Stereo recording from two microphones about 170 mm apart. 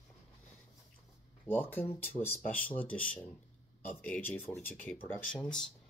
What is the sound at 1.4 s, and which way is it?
Speech, 10° left (ahead or behind).